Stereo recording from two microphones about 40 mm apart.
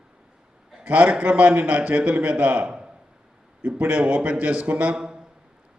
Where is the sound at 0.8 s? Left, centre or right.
Right.